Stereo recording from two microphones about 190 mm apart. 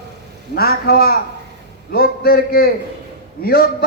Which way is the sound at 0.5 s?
55° left (ahead or behind).